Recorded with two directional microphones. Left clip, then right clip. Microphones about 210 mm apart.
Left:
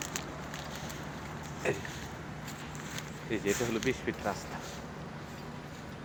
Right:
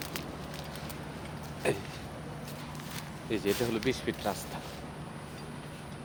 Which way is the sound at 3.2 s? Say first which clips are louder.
Right 1 dB; 15° right (ahead or behind).